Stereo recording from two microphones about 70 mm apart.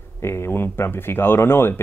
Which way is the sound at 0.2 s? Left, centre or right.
Left.